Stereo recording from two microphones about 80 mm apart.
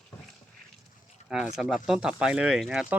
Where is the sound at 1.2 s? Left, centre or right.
Centre.